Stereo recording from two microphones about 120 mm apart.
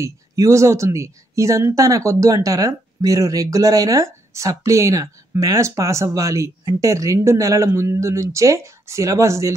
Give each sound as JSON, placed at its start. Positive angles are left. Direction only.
{"t": 0.0, "sound": "speech", "side_deg": -25}